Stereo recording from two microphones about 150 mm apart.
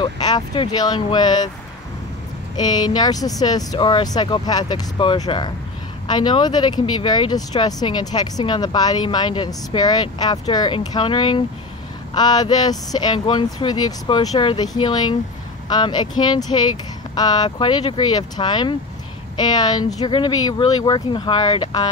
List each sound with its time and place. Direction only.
0.0 s speech: 25° left (ahead or behind)
2.5 s speech: 25° left (ahead or behind)